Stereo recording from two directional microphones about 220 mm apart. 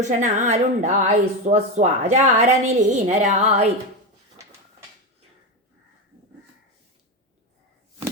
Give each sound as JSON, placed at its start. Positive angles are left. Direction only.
{"t": 0.0, "sound": "a woman's voice", "side_deg": -35}